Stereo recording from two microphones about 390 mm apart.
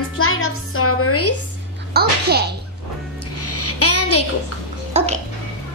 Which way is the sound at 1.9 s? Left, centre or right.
Right.